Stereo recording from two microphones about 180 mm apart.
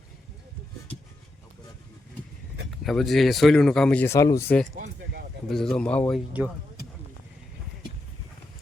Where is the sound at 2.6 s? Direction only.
Centre (ahead or behind).